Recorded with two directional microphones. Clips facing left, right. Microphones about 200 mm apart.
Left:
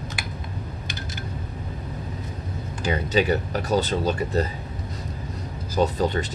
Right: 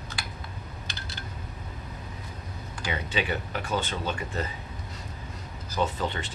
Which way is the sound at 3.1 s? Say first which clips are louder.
Left 9 dB; 40° left (ahead or behind).